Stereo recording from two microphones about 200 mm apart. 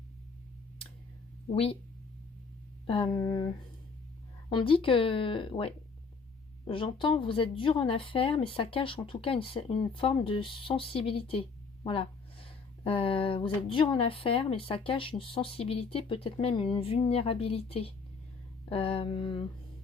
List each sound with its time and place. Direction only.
1.5 s speech: 30° left (ahead or behind)
2.8 s speech: 25° left (ahead or behind)
4.4 s speech: 25° left (ahead or behind)